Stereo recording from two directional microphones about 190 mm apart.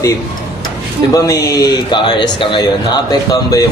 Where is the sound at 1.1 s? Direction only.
15° left (ahead or behind).